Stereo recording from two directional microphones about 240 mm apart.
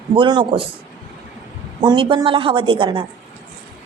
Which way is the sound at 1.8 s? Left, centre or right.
Centre.